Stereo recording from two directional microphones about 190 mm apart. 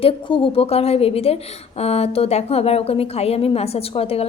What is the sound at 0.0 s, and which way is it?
A woman's voice, 30° left (ahead or behind).